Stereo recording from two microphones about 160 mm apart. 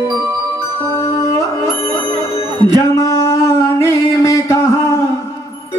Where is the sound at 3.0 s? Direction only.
20° left (ahead or behind).